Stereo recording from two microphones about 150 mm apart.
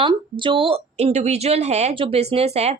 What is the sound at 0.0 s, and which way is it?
Speech, 35° right (ahead or behind).